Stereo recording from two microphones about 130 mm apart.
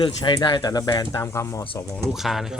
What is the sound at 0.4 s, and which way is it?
Speech, 35° left (ahead or behind).